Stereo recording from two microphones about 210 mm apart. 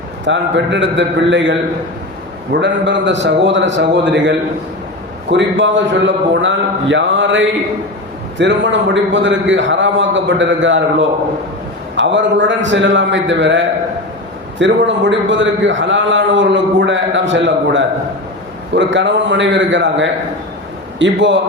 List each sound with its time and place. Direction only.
0.3 s a man's voice: 60° right (ahead or behind)
11.9 s a man's voice: 60° right (ahead or behind)